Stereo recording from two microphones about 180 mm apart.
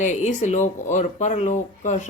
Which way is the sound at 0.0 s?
40° left (ahead or behind).